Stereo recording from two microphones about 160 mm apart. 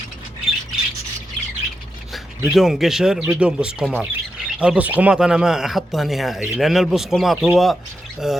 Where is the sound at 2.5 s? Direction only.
Centre (ahead or behind).